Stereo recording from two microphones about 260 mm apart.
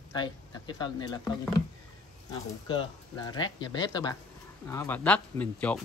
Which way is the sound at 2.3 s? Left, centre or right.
Centre.